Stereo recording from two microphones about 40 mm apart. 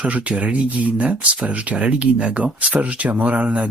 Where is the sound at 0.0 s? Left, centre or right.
Right.